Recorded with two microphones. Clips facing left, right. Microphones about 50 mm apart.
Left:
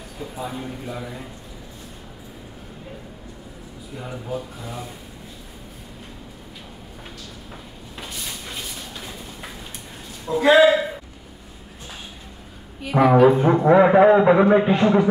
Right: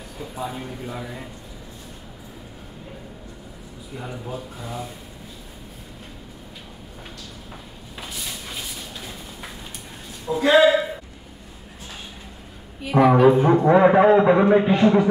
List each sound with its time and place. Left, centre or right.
0.2 s a man's voice: centre
4.0 s a man's voice: centre
8.0 s a sound: centre
10.2 s speech: centre
12.8 s a man's voice: centre